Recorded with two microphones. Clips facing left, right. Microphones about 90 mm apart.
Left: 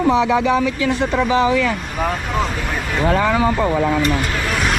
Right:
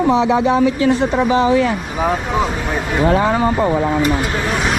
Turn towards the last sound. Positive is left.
turn(degrees=0)  # may be behind; listen again after turning